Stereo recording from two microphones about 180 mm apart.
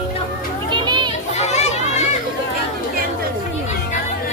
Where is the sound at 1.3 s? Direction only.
40° left (ahead or behind).